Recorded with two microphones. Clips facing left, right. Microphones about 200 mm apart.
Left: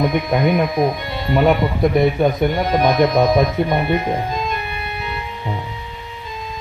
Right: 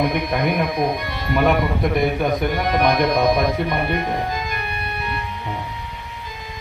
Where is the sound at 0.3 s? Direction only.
25° left (ahead or behind).